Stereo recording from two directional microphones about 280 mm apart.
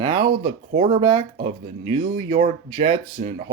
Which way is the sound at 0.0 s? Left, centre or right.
Centre.